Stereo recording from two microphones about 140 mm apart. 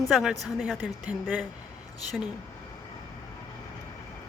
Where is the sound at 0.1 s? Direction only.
5° right (ahead or behind).